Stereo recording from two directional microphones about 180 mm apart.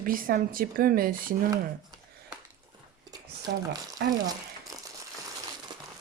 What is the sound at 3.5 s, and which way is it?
Speech, 65° right (ahead or behind).